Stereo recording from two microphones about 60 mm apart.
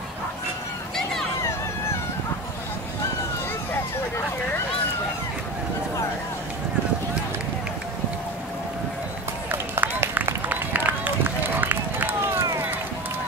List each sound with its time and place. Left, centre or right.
9.5 s run: right
12.4 s run: right